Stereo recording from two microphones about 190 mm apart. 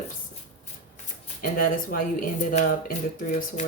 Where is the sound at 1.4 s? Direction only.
45° left (ahead or behind).